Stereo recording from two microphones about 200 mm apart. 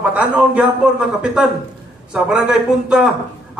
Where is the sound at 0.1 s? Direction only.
5° right (ahead or behind).